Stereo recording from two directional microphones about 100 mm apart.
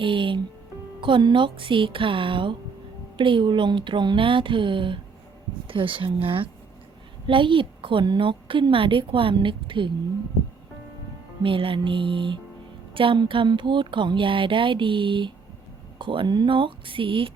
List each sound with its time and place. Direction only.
0.0 s a woman's voice: 55° right (ahead or behind)
11.4 s a woman's voice: 60° right (ahead or behind)